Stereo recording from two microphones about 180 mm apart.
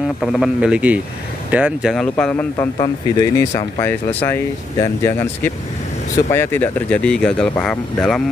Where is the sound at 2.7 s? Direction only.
20° left (ahead or behind).